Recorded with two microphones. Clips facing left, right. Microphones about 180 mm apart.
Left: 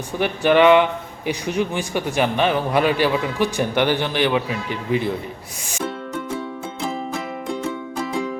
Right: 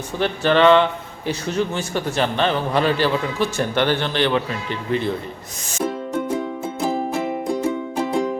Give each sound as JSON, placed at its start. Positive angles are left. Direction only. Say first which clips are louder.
{"t": 0.2, "sound": "speech", "louder": "left 1 dB", "side_deg": 15}
{"t": 6.7, "sound": "music", "louder": "right 5 dB", "side_deg": -35}